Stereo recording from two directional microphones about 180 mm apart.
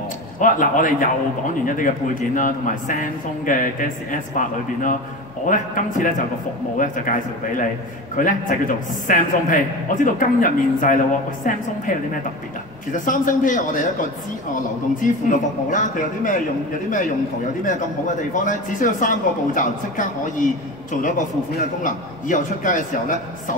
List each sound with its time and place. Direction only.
0.4 s a man's voice: 45° left (ahead or behind)
12.9 s a man's voice: 45° left (ahead or behind)
15.0 s a man's voice: 45° left (ahead or behind)
17.6 s a man's voice: 45° left (ahead or behind)
21.5 s a man's voice: 45° left (ahead or behind)